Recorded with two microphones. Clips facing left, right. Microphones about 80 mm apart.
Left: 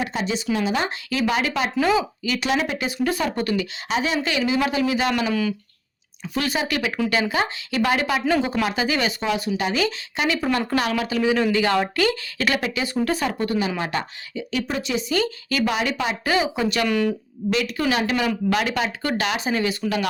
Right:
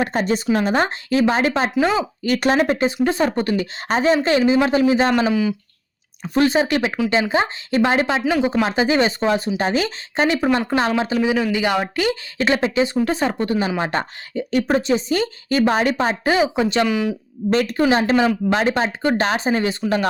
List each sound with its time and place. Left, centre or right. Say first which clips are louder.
0.0 s speech: right 5 dB; right
2.2 s speech: right 6 dB; right
3.0 s speech: right 4 dB; right
5.3 s speech: right 4 dB; centre
6.2 s speech: right 8 dB; right
8.2 s speech: right 2 dB; centre
8.6 s speech: right 5 dB; right
14.0 s speech: right 5 dB; right
16.8 s speech: right 1 dB; centre
17.5 s speech: right 5 dB; right